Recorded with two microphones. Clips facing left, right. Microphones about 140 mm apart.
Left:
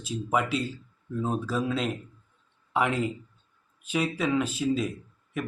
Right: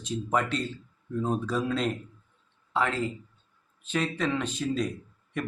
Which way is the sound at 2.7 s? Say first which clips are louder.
Left 2 dB; 15° left (ahead or behind).